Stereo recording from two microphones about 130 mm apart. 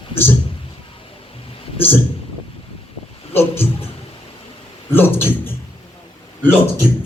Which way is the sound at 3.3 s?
15° left (ahead or behind).